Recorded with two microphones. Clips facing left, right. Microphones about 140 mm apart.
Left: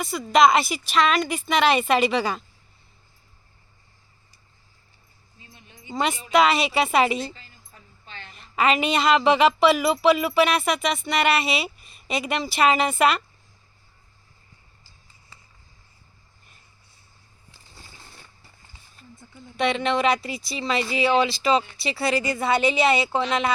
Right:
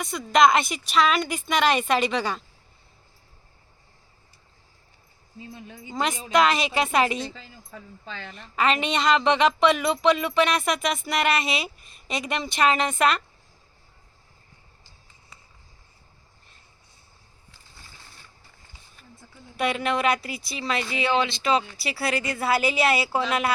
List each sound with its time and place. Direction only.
0.0 s speech: centre (ahead or behind)
5.9 s speech: centre (ahead or behind)
7.7 s speech: 90° right
8.5 s speech: 5° left (ahead or behind)
19.5 s speech: 5° right (ahead or behind)